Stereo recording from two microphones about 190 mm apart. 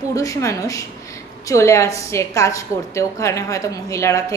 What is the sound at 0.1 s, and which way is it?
A woman's voice, 15° left (ahead or behind).